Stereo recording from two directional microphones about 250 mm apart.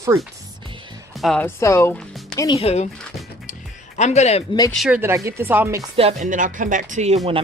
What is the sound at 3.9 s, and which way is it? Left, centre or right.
Speech, left.